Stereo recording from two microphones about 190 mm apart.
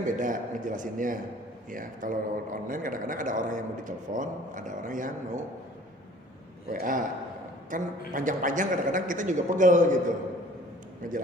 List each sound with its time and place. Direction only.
0.0 s speech: 45° right (ahead or behind)
6.7 s speech: 45° right (ahead or behind)
11.0 s speech: 45° right (ahead or behind)